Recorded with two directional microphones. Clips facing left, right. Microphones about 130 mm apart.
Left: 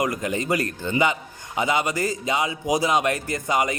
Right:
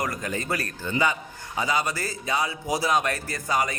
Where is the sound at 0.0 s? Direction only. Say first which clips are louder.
Left 5 dB; 20° left (ahead or behind).